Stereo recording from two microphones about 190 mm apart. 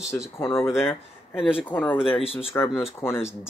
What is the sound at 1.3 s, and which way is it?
Speech, 5° right (ahead or behind).